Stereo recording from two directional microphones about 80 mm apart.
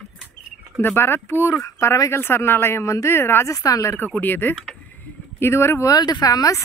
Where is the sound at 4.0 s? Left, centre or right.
Left.